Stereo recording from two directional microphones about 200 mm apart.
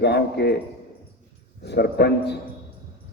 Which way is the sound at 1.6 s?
55° left (ahead or behind).